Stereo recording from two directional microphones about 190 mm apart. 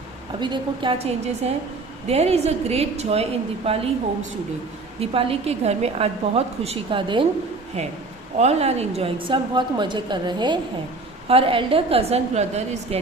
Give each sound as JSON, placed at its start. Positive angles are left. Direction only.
{"t": 0.3, "sound": "a woman's voice", "side_deg": -25}
{"t": 4.9, "sound": "a woman's voice", "side_deg": -30}